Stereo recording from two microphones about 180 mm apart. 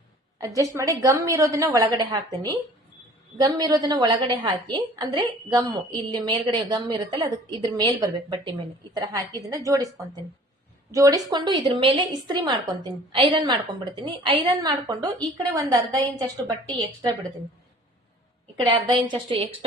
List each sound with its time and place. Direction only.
0.3 s a woman's voice: 20° right (ahead or behind)
10.9 s a woman's voice: 20° right (ahead or behind)
18.7 s a woman's voice: 25° right (ahead or behind)